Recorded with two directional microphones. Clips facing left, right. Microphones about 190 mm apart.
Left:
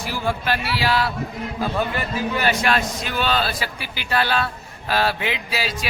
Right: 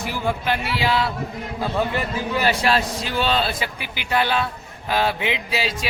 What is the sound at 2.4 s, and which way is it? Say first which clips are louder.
Music: right 2 dB; 30° right (ahead or behind).